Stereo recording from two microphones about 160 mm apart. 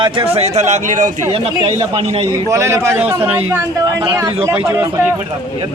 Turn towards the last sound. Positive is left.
turn(degrees=-20)  # may be behind; listen again after turning